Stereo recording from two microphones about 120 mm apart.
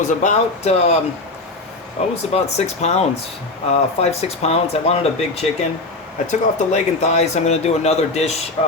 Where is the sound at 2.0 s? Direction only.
65° left (ahead or behind).